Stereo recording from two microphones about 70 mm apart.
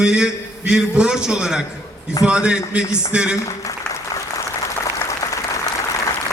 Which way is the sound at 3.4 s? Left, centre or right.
Left.